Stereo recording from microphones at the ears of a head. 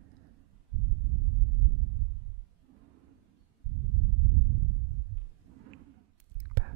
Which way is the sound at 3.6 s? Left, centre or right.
Right.